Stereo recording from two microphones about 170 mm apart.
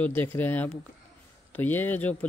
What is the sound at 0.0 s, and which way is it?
Speech, 10° left (ahead or behind).